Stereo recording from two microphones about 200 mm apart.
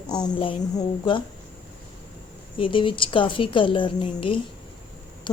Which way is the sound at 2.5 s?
25° left (ahead or behind).